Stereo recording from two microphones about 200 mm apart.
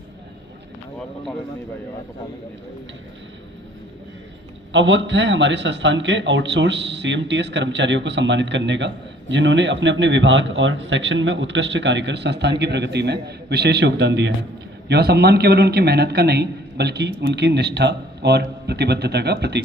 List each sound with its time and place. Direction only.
4.7 s a man's voice: 65° right (ahead or behind)